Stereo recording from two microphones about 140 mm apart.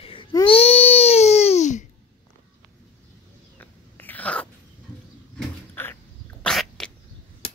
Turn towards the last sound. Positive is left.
turn(degrees=5)  # may be behind; listen again after turning